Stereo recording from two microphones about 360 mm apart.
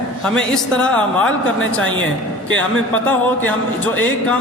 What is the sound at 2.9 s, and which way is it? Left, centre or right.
Speech, centre.